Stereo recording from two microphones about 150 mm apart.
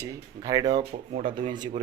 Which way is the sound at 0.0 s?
20° right (ahead or behind).